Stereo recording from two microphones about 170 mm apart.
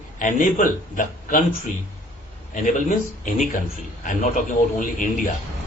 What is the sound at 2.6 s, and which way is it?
A man's voice, 50° left (ahead or behind).